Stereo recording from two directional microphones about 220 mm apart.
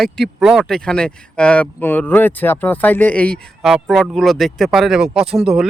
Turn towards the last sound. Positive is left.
turn(degrees=-5)  # may be behind; listen again after turning